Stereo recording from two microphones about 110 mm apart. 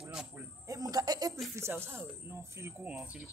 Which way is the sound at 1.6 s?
20° right (ahead or behind).